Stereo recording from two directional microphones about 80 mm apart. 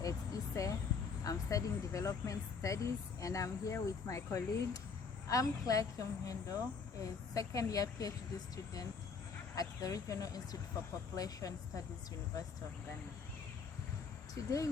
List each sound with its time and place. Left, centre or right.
0.0 s vehicle: left
1.2 s speech: left
9.6 s speech: left
14.3 s speech: left